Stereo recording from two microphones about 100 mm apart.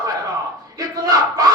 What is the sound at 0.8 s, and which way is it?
Speech, 35° right (ahead or behind).